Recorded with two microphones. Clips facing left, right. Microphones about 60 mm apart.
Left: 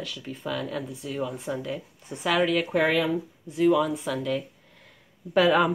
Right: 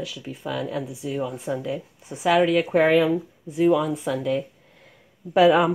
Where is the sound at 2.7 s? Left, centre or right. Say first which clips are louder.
Right 5 dB; right.